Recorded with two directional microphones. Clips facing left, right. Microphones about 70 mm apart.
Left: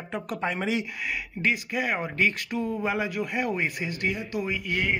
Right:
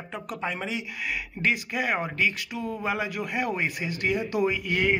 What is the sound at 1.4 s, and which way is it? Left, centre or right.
Speech, right.